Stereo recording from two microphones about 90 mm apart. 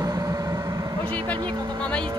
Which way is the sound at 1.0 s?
65° right (ahead or behind).